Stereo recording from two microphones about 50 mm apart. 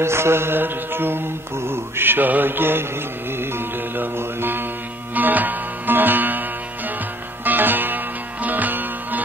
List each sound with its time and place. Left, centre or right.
0.0 s mantra: right
3.3 s music: right
5.1 s music: right
7.4 s music: right